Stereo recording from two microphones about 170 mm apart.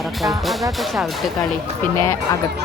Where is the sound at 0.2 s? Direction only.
Centre (ahead or behind).